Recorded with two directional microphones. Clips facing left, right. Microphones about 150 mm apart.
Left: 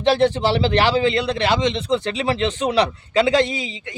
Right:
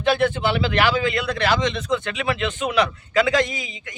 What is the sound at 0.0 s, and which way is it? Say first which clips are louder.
A man's voice: left 3 dB; 30° left (ahead or behind).